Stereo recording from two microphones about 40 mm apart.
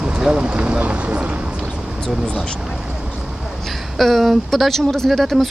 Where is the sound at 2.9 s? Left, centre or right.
Right.